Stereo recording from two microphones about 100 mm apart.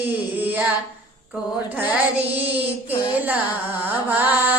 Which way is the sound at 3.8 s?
20° right (ahead or behind).